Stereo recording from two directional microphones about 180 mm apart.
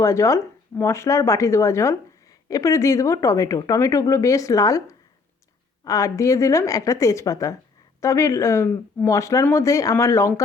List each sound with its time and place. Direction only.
0.0 s speech: 15° left (ahead or behind)